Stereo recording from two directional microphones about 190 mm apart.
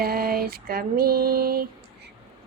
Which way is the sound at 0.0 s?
50° right (ahead or behind).